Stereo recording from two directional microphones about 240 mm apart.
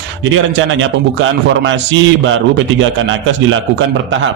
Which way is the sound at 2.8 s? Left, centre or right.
Right.